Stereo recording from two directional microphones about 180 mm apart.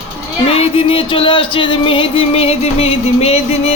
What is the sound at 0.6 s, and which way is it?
Music, 30° left (ahead or behind).